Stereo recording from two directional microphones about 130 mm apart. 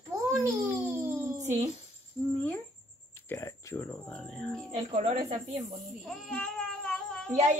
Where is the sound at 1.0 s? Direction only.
20° right (ahead or behind).